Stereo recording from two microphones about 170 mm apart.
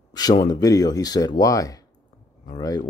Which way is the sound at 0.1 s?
25° left (ahead or behind).